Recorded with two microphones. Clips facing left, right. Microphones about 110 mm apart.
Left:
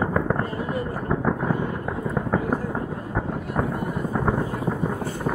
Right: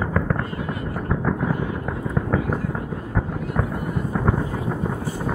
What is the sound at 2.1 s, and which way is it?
Fireworks, 5° left (ahead or behind).